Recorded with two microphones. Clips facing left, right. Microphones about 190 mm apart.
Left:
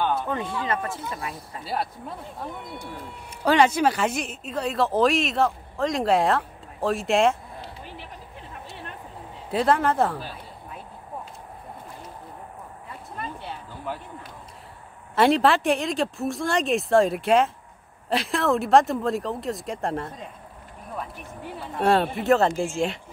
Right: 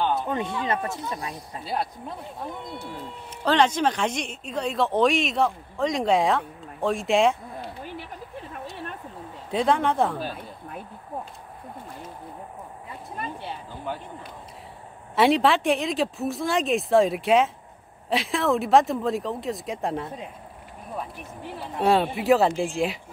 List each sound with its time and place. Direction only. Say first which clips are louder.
0.1 s speech: right 1 dB; 20° right (ahead or behind)
1.6 s speech: even; centre (ahead or behind)
9.5 s speech: left 1 dB; 5° left (ahead or behind)
15.1 s speech: even; centre (ahead or behind)
21.7 s speech: even; centre (ahead or behind)